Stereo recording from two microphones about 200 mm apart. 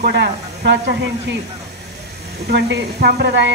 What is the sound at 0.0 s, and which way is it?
Speech, 55° right (ahead or behind).